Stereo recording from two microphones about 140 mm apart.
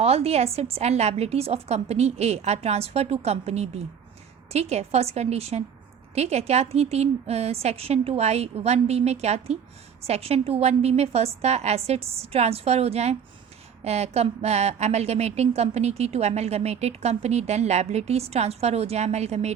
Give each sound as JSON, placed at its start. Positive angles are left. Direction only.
{"t": 0.0, "sound": "a woman's voice", "side_deg": -45}